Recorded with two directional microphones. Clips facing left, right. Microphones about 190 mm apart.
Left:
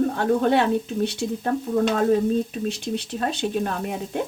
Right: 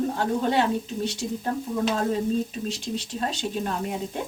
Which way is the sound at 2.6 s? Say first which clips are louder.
Left 4 dB; 60° left (ahead or behind).